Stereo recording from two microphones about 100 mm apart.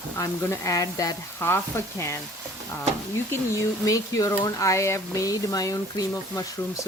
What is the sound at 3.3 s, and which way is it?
Speech, 30° left (ahead or behind).